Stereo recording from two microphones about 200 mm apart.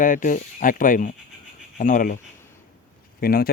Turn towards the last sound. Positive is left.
turn(degrees=50)  # may be behind; listen again after turning